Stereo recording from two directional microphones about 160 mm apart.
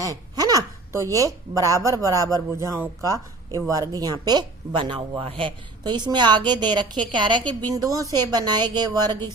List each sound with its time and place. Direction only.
0.0 s speech: 20° right (ahead or behind)